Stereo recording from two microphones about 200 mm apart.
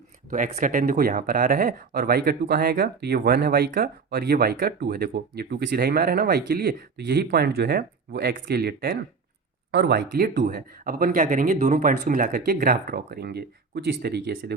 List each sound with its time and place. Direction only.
0.3 s speech: 40° right (ahead or behind)